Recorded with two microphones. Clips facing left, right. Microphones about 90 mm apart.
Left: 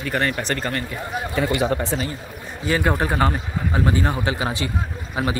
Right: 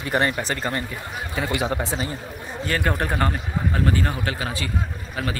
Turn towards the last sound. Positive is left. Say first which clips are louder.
# left 4 dB
turn(degrees=20)  # may be behind; listen again after turning